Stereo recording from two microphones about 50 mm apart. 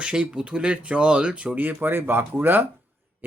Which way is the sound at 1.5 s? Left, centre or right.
Right.